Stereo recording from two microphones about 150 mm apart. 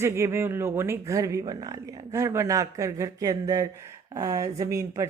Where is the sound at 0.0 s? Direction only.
20° right (ahead or behind).